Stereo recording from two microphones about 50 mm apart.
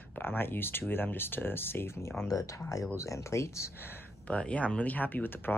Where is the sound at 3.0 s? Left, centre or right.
Left.